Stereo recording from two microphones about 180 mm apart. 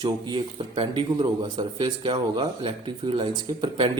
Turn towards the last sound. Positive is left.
turn(degrees=-25)  # may be behind; listen again after turning